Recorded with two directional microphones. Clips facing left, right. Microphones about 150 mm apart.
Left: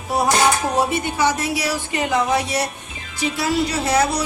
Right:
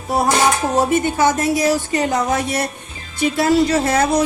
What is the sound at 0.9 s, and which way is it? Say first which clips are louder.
Speech: right 4 dB; 50° right (ahead or behind).